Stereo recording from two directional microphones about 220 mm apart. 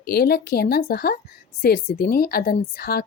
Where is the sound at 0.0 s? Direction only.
45° left (ahead or behind).